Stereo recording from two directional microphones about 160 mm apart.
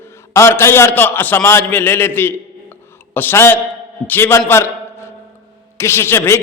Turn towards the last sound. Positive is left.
turn(degrees=15)  # may be behind; listen again after turning